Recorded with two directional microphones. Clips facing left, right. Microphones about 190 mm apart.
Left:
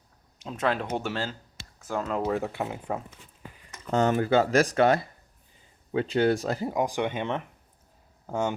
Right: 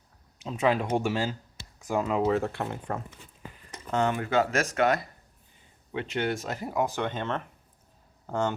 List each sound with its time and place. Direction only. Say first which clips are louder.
0.4 s speech: right 2 dB; 5° right (ahead or behind)
3.9 s speech: left 3 dB; 35° left (ahead or behind)
6.7 s speech: right 2 dB; 15° left (ahead or behind)